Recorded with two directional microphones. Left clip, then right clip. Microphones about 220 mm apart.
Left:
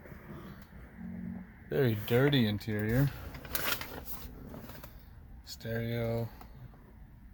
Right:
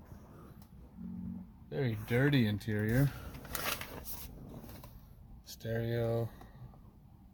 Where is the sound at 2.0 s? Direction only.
5° left (ahead or behind).